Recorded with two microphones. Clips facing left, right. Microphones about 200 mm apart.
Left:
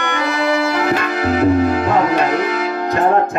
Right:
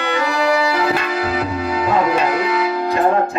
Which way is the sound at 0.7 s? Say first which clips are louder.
Left 1 dB; 50° left (ahead or behind).